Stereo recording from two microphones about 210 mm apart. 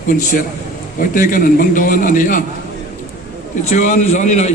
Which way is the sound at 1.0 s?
40° left (ahead or behind).